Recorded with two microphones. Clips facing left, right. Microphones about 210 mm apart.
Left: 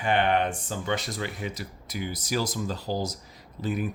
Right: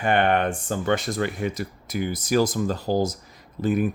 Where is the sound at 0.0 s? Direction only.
50° right (ahead or behind).